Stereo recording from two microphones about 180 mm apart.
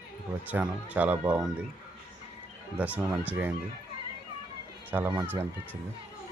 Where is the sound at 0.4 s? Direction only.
10° right (ahead or behind).